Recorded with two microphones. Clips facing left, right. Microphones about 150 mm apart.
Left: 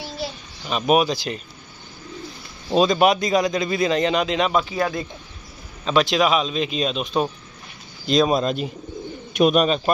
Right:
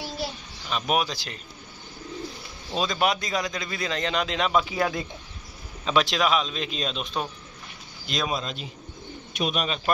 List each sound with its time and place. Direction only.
0.7 s a man's voice: 15° left (ahead or behind)
2.7 s a man's voice: 20° left (ahead or behind); by 4.6 s centre (ahead or behind)
4.6 s speech: 15° right (ahead or behind)
5.9 s a man's voice: centre (ahead or behind)
8.1 s speech: 35° left (ahead or behind)
8.4 s speech: 50° left (ahead or behind)